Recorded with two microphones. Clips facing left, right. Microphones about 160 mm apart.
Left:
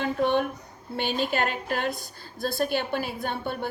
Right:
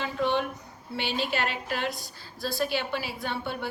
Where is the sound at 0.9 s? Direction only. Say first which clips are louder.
Left 3 dB; 50° left (ahead or behind).